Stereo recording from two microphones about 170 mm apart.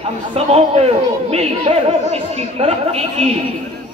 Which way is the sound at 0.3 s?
35° right (ahead or behind).